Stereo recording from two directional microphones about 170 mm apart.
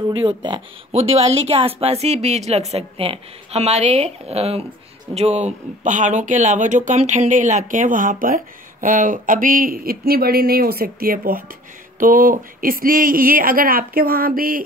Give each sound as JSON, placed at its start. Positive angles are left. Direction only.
{"t": 0.1, "sound": "a woman's voice", "side_deg": -25}